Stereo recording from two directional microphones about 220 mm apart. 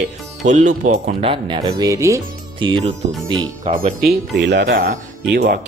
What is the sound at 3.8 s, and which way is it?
Speech, 40° right (ahead or behind).